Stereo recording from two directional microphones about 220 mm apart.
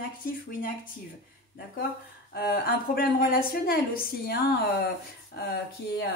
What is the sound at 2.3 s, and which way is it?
A woman's voice, 45° left (ahead or behind).